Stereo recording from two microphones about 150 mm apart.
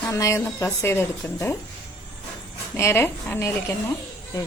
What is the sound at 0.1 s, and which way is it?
A woman's voice, 20° left (ahead or behind).